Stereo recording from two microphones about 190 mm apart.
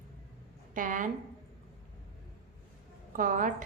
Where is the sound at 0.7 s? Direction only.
45° right (ahead or behind).